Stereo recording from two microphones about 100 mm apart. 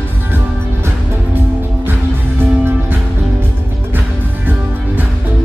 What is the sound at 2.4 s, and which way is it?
Music, 20° right (ahead or behind).